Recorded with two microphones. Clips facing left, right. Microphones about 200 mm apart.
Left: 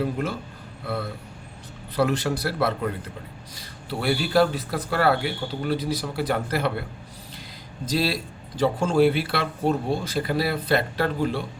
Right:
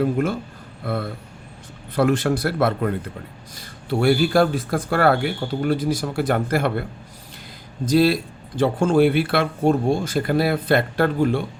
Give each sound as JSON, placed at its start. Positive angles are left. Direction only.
{"t": 0.0, "sound": "speech", "side_deg": -50}
{"t": 2.0, "sound": "a man's voice", "side_deg": -50}
{"t": 7.9, "sound": "a man's voice", "side_deg": -55}